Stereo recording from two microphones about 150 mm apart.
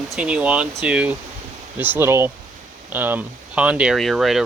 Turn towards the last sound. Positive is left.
turn(degrees=0)  # may be behind; listen again after turning